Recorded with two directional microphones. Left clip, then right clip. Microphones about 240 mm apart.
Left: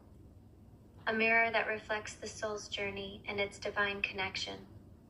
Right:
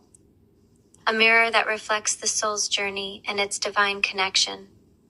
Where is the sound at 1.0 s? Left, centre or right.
Right.